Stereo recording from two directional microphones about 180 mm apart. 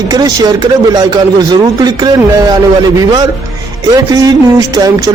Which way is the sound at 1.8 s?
20° right (ahead or behind).